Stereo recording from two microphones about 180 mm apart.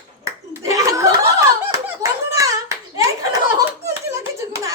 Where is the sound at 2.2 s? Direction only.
20° right (ahead or behind).